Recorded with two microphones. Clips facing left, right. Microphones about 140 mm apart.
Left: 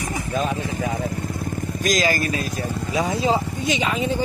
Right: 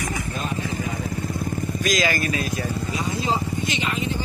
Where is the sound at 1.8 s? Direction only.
40° left (ahead or behind).